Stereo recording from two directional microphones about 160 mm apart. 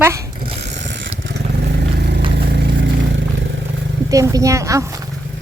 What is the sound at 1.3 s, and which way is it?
Vehicle, 90° right.